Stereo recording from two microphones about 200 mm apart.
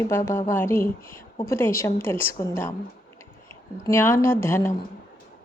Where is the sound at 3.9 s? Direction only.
10° left (ahead or behind).